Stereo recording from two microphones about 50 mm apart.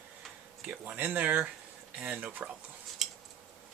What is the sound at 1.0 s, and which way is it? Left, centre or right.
Speech, right.